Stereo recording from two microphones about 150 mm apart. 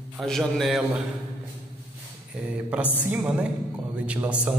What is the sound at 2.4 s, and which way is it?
Mantra, 10° right (ahead or behind).